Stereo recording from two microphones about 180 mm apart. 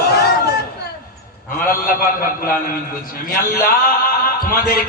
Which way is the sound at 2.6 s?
50° left (ahead or behind).